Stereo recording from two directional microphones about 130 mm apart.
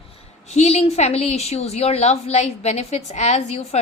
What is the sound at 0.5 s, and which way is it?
A woman's voice, 60° left (ahead or behind).